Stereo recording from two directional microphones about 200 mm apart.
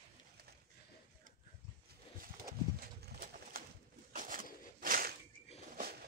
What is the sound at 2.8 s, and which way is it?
Pigeon, 45° right (ahead or behind).